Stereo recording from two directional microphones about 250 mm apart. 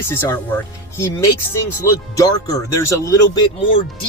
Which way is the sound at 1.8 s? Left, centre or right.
Centre.